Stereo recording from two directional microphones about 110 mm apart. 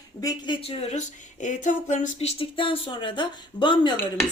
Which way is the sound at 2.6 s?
50° left (ahead or behind).